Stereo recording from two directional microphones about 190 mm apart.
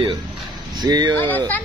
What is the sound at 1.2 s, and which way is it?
Speech, 10° left (ahead or behind).